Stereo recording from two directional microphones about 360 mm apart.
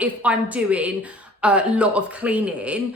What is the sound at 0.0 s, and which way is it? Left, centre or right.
A woman's voice, centre.